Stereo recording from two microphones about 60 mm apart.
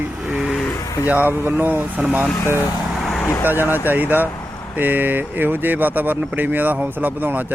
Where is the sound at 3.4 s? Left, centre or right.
Right.